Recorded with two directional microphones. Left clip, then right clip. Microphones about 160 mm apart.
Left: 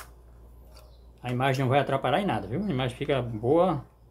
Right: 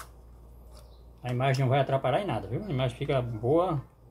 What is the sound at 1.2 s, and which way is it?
Speech, 30° left (ahead or behind).